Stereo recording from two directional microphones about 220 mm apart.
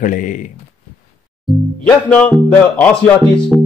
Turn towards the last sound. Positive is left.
turn(degrees=0)  # may be behind; listen again after turning